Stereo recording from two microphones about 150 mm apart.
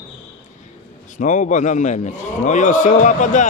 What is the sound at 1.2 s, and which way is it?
Speech, 60° left (ahead or behind).